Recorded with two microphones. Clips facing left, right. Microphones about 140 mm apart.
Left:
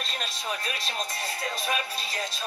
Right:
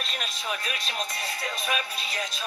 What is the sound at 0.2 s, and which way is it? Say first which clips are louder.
Speech: even; 35° left (ahead or behind).